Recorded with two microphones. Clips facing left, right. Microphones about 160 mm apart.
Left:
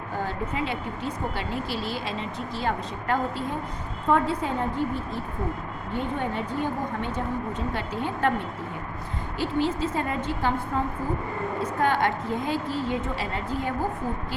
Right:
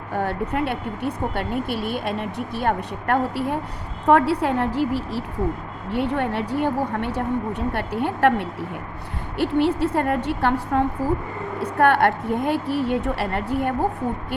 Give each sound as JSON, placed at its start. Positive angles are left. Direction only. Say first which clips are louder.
{"t": 0.1, "sound": "a woman's voice", "louder": "right 6 dB", "side_deg": -65}